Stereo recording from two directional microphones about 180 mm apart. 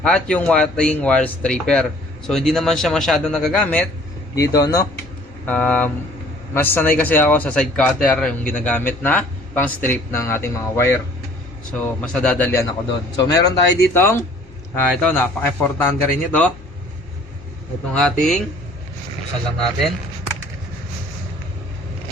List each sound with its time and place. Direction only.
0.0 s speech: 5° left (ahead or behind)
4.4 s speech: 20° left (ahead or behind)
5.5 s speech: 10° left (ahead or behind)
17.9 s speech: 5° left (ahead or behind)